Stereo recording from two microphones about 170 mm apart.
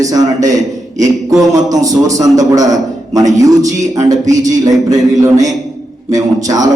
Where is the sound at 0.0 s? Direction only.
20° right (ahead or behind).